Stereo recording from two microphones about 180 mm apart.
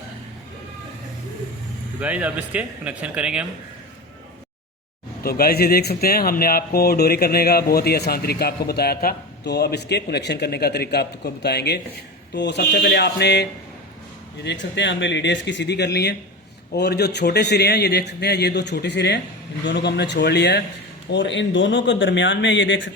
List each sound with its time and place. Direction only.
2.0 s speech: 5° right (ahead or behind)
5.2 s a man's voice: 60° left (ahead or behind)
14.4 s a man's voice: 80° left; by 20.6 s 65° left (ahead or behind)
21.1 s a man's voice: 80° left